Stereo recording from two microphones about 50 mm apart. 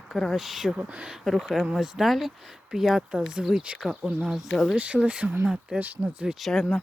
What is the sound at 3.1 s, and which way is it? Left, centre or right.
Speech, centre.